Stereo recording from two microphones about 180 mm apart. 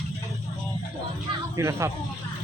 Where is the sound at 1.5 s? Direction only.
15° right (ahead or behind).